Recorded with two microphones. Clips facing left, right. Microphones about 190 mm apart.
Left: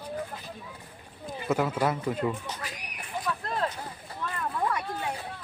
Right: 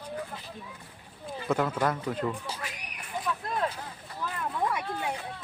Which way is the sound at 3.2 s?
10° right (ahead or behind).